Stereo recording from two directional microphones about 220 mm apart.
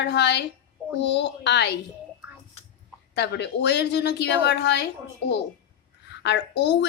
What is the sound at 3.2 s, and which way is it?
A woman's voice, 50° left (ahead or behind).